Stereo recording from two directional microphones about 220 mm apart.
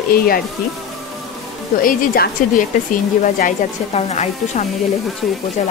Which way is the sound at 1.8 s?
40° left (ahead or behind).